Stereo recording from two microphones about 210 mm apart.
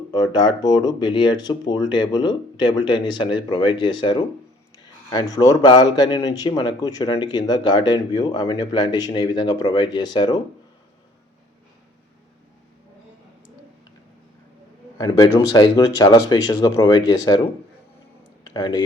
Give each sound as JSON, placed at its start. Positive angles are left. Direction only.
{"t": 0.1, "sound": "a man's voice", "side_deg": 20}
{"t": 14.9, "sound": "a man's voice", "side_deg": 20}
{"t": 18.5, "sound": "speech", "side_deg": 20}